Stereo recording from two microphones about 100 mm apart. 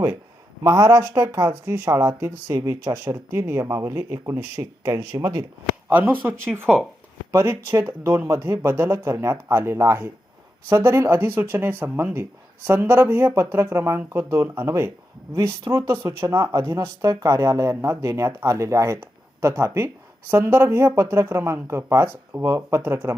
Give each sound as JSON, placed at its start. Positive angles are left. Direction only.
{"t": 0.6, "sound": "speech", "side_deg": -30}
{"t": 2.6, "sound": "speech", "side_deg": -40}
{"t": 3.1, "sound": "speech", "side_deg": -25}
{"t": 5.9, "sound": "speech", "side_deg": -15}